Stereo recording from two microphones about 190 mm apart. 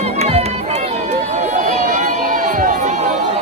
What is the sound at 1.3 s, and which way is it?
Crowd, 40° right (ahead or behind).